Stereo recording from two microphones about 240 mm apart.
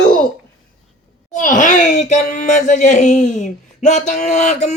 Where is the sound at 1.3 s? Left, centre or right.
Left.